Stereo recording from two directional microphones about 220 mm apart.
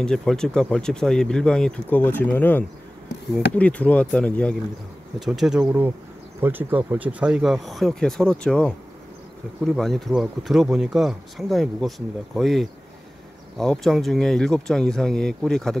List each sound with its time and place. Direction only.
0.0 s speech: 5° left (ahead or behind)